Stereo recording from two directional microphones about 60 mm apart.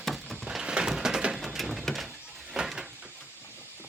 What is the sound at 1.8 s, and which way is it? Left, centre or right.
Door, centre.